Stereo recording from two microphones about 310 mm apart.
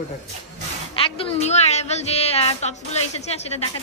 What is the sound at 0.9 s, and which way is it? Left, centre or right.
A woman's voice, centre.